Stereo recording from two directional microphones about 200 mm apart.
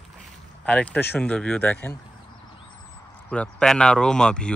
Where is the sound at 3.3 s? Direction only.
5° left (ahead or behind).